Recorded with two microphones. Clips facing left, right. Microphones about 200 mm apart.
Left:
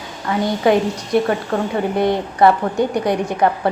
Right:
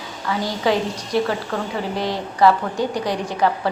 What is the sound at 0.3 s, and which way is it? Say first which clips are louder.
A woman's voice: left 5 dB; 55° left (ahead or behind).